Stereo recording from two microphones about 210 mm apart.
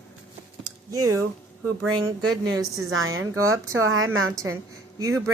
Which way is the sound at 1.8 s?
90° right.